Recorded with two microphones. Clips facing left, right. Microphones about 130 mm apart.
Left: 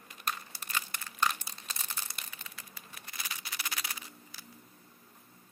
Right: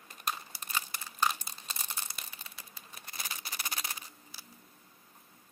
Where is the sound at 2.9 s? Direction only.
30° right (ahead or behind).